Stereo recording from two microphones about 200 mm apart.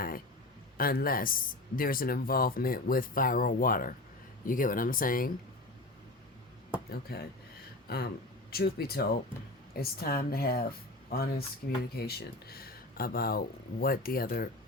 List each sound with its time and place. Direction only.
0.8 s speech: 45° left (ahead or behind)
7.1 s speech: 50° left (ahead or behind)